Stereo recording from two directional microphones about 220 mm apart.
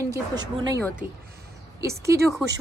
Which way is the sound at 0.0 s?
15° right (ahead or behind).